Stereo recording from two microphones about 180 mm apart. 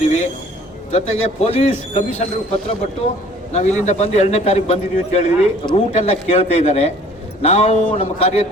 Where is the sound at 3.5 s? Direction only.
40° left (ahead or behind).